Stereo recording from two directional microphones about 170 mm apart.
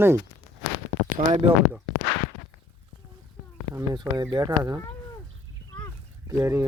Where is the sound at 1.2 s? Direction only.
35° right (ahead or behind).